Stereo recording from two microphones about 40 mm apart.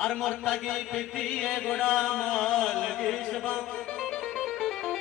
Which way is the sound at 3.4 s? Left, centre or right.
Centre.